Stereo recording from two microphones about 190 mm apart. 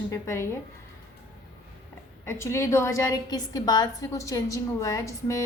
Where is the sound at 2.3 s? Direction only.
15° left (ahead or behind).